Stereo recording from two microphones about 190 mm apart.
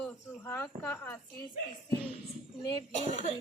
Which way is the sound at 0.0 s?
10° left (ahead or behind).